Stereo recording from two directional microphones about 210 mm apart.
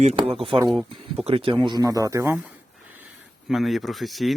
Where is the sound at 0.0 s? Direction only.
30° right (ahead or behind); by 2.5 s 10° right (ahead or behind).